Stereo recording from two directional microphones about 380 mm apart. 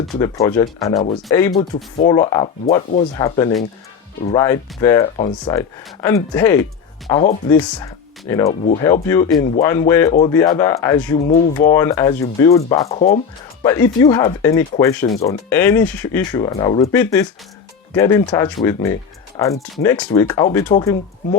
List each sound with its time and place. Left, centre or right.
0.2 s speech: centre